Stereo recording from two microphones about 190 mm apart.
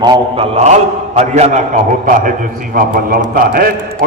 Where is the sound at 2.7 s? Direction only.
50° right (ahead or behind).